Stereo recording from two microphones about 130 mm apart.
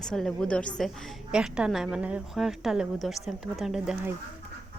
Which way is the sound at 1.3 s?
5° right (ahead or behind).